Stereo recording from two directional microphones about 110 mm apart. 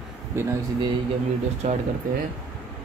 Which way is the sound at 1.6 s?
90° right.